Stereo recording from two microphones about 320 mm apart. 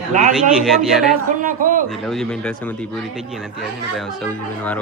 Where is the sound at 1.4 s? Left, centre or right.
Right.